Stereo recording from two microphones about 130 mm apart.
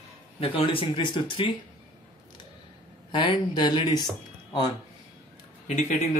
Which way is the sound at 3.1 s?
40° left (ahead or behind).